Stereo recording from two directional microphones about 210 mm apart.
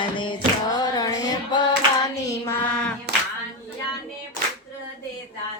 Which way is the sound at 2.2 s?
10° left (ahead or behind).